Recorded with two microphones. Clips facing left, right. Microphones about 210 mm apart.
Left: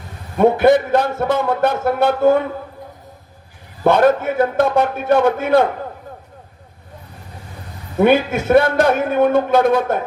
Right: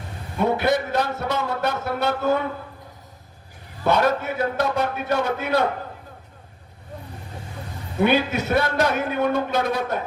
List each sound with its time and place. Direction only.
0.3 s a man's voice: 50° left (ahead or behind)
3.8 s a man's voice: 50° left (ahead or behind)
8.0 s a man's voice: 50° left (ahead or behind)